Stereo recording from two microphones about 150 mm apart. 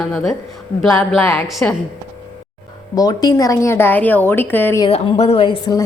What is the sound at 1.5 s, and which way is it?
Speech, centre (ahead or behind).